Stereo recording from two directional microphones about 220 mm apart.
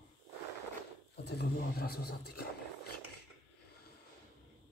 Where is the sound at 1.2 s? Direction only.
45° left (ahead or behind).